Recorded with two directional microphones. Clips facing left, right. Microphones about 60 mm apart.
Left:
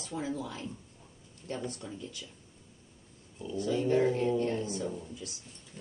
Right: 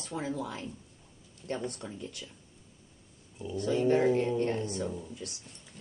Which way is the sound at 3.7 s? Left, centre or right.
Right.